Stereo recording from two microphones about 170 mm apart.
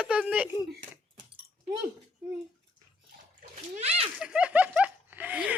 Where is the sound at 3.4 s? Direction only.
45° right (ahead or behind).